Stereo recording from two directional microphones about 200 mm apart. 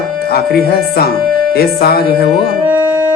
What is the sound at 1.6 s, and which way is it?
Speech, 50° left (ahead or behind).